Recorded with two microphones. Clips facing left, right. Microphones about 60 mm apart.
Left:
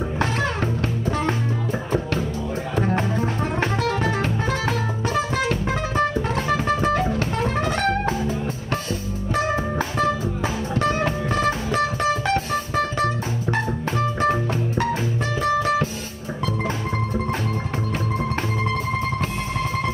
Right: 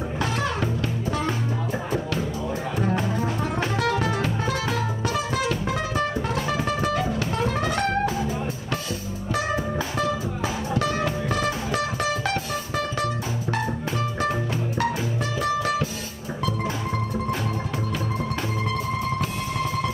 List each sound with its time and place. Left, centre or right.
0.2 s music: left
2.8 s music: left
9.3 s music: left
15.4 s music: left